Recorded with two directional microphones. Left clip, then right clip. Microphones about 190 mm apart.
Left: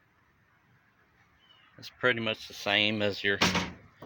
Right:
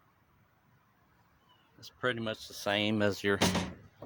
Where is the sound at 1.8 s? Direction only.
15° left (ahead or behind); by 3.4 s 30° right (ahead or behind).